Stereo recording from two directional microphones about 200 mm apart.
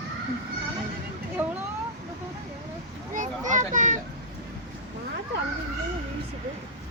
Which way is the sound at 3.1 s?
40° right (ahead or behind).